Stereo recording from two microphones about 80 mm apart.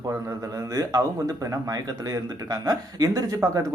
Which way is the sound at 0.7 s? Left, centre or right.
Right.